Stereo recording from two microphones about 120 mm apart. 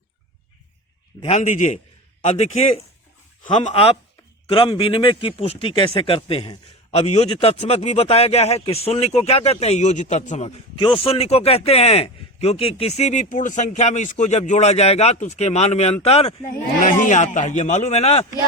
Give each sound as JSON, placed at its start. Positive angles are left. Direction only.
{"t": 1.2, "sound": "a man's voice", "side_deg": 75}
{"t": 2.2, "sound": "a man's voice", "side_deg": 60}
{"t": 4.4, "sound": "a man's voice", "side_deg": 50}
{"t": 10.8, "sound": "a man's voice", "side_deg": 45}